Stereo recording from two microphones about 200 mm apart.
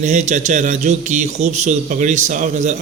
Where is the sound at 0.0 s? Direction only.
35° right (ahead or behind).